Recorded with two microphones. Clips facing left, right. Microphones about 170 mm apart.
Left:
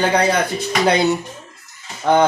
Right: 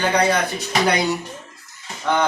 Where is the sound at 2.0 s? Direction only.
45° left (ahead or behind).